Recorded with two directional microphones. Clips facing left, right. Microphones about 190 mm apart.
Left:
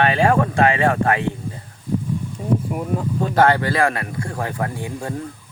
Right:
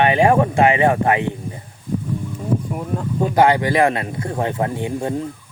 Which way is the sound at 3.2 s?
15° right (ahead or behind).